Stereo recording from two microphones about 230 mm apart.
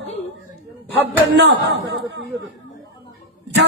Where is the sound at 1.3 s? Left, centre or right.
Right.